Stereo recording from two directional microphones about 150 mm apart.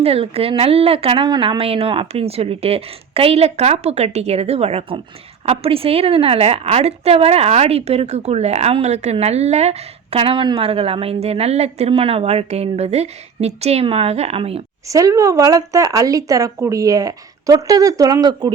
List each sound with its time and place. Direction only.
0.0 s a woman's voice: 40° right (ahead or behind)
14.8 s speech: 20° right (ahead or behind)